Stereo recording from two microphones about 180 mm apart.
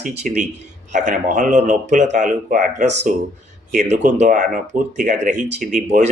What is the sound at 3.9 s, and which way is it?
Speech, 45° right (ahead or behind).